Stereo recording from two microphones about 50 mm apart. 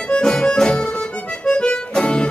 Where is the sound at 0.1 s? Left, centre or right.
Centre.